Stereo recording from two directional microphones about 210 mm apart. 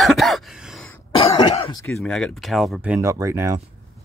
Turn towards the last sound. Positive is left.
turn(degrees=-15)  # may be behind; listen again after turning